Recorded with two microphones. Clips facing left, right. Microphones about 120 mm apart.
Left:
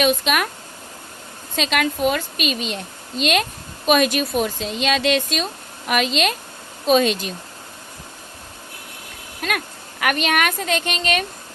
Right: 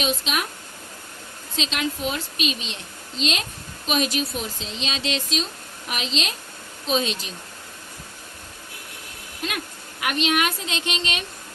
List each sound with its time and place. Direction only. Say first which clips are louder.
0.0 s speech: left 7 dB; 55° left (ahead or behind)
1.5 s speech: left 6 dB; 60° left (ahead or behind)
10.0 s speech: left 3 dB; 55° left (ahead or behind)